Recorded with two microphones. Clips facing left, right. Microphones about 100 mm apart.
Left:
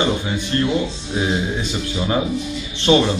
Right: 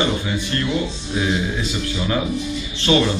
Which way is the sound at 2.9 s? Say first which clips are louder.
Left 2 dB; 20° left (ahead or behind).